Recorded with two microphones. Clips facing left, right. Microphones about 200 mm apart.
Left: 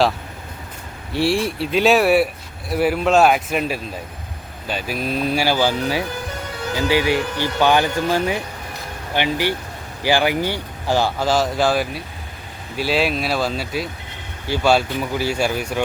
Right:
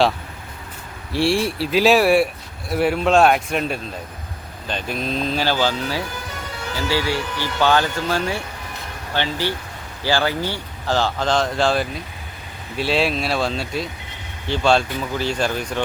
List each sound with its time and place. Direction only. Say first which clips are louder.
1.1 s speech: even; centre (ahead or behind)